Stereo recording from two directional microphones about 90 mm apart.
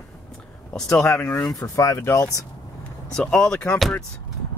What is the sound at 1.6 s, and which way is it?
Speech, 40° left (ahead or behind).